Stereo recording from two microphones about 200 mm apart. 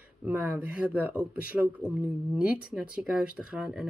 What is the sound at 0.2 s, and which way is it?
Speech, 10° right (ahead or behind).